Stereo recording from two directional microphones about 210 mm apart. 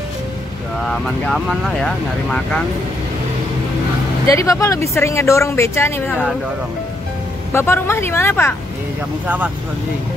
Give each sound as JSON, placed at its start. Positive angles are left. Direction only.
{"t": 0.8, "sound": "speech", "side_deg": 0}
{"t": 4.3, "sound": "a woman's voice", "side_deg": 15}
{"t": 6.0, "sound": "speech", "side_deg": -5}
{"t": 7.5, "sound": "a woman's voice", "side_deg": 10}